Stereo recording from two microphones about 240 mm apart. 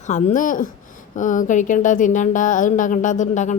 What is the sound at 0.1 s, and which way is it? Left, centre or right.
Speech, left.